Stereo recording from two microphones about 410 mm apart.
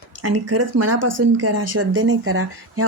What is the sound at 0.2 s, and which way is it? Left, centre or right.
Speech, right.